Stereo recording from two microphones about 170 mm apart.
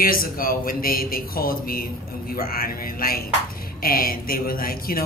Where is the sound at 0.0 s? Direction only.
60° left (ahead or behind).